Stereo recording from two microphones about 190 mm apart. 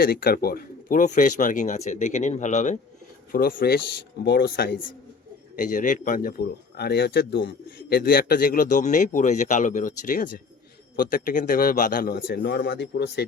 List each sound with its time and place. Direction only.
0.0 s speech: 55° left (ahead or behind); by 2.7 s 40° left (ahead or behind)
3.3 s speech: 50° left (ahead or behind)